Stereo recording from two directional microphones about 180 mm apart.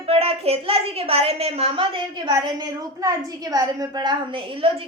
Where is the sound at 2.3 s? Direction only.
20° right (ahead or behind).